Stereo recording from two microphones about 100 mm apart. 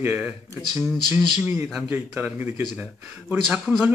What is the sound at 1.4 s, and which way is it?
Speech, 20° right (ahead or behind).